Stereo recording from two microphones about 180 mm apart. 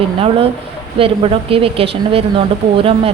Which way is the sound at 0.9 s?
30° right (ahead or behind).